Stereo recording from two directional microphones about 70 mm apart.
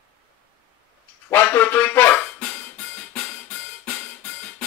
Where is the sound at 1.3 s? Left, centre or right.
Left.